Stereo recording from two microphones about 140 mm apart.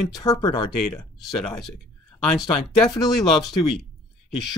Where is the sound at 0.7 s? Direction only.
Centre (ahead or behind).